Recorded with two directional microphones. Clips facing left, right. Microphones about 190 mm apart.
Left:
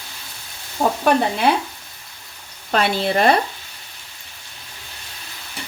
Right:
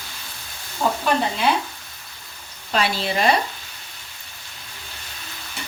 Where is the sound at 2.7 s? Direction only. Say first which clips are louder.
Left 4 dB; 55° left (ahead or behind).